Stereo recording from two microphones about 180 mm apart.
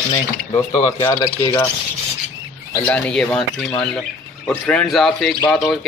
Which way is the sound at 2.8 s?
5° left (ahead or behind).